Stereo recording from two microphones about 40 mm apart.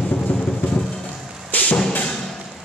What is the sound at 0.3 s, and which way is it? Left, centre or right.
Music, left.